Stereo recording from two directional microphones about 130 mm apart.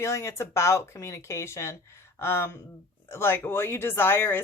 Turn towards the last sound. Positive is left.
turn(degrees=15)  # may be behind; listen again after turning